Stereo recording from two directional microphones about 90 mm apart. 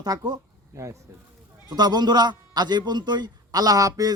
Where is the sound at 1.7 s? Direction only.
50° right (ahead or behind).